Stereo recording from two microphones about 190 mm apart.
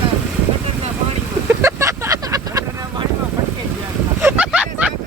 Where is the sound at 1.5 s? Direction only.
15° right (ahead or behind).